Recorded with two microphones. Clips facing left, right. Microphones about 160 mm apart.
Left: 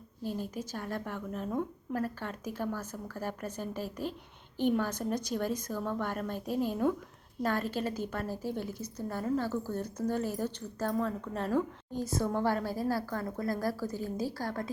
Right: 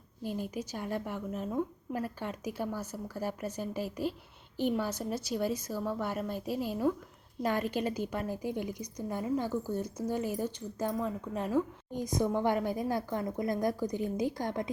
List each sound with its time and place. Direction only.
0.5 s a woman's voice: 10° right (ahead or behind)